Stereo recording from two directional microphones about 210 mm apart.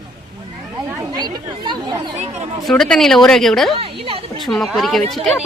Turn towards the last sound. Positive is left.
turn(degrees=0)  # may be behind; listen again after turning